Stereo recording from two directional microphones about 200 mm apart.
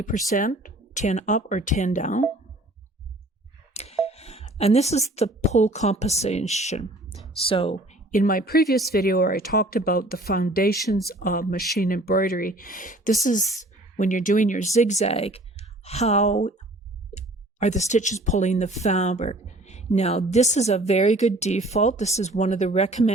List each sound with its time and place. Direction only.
0.0 s speech: 40° left (ahead or behind)
3.8 s speech: 30° left (ahead or behind)
8.1 s speech: 45° left (ahead or behind)